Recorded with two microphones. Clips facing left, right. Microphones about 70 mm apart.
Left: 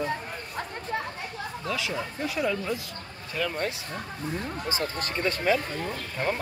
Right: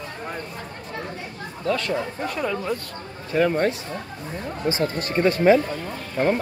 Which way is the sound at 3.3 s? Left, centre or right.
Right.